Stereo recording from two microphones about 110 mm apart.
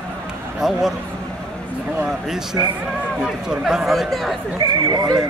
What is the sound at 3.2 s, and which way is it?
Speech, 5° right (ahead or behind).